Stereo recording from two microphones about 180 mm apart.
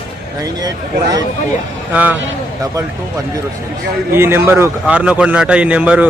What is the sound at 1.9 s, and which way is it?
Speech, 10° right (ahead or behind).